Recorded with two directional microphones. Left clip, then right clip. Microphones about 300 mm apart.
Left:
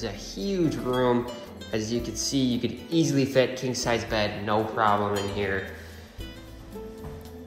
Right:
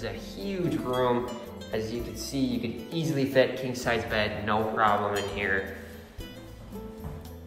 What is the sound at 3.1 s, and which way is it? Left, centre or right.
A man's voice, left.